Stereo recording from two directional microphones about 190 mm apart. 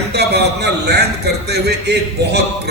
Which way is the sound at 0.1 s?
60° right (ahead or behind).